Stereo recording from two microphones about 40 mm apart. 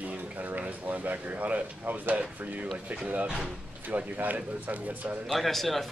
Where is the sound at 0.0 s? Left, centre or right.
Right.